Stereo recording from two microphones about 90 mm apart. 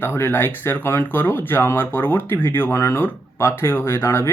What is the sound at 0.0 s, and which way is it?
Speech, 25° left (ahead or behind).